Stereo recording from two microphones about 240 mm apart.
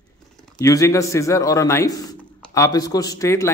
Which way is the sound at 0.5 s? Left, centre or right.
Centre.